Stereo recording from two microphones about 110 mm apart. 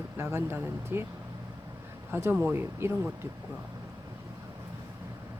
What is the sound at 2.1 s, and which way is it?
Speech, 20° right (ahead or behind).